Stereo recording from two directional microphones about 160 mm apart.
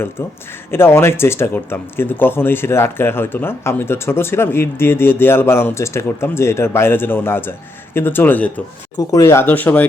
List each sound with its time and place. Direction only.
0.2 s speech: 15° left (ahead or behind)